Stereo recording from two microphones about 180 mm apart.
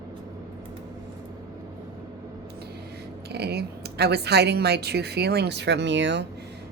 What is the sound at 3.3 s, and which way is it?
Speech, 65° right (ahead or behind).